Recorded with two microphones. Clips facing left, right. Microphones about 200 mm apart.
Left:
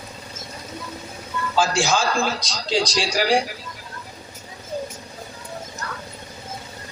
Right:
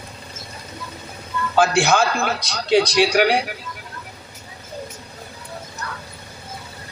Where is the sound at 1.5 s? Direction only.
60° right (ahead or behind).